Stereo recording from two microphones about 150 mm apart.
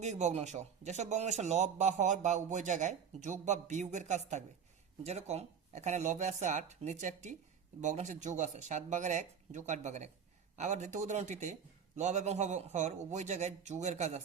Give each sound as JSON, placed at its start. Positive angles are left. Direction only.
{"t": 0.0, "sound": "speech", "side_deg": -50}